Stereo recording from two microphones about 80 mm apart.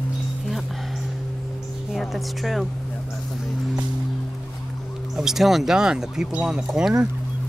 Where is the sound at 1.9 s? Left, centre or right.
Centre.